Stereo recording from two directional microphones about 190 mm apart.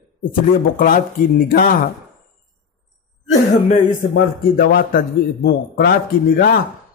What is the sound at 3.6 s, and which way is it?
A man's voice, 45° left (ahead or behind).